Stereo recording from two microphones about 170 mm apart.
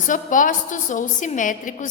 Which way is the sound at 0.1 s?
50° left (ahead or behind).